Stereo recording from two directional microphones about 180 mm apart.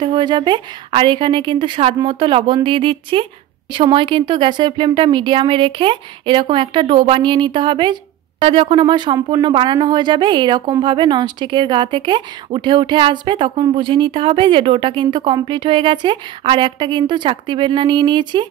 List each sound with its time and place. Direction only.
0.0 s speech: 25° right (ahead or behind)